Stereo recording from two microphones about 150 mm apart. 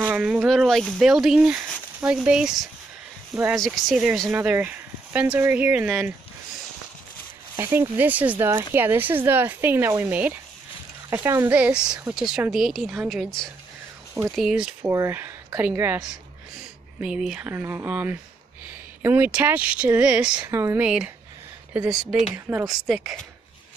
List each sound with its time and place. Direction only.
0.1 s speech: 5° right (ahead or behind)
7.5 s speech: 15° right (ahead or behind)
14.9 s speech: 20° right (ahead or behind)
17.0 s speech: 5° right (ahead or behind)
20.4 s speech: 20° right (ahead or behind)
22.8 s speech: centre (ahead or behind)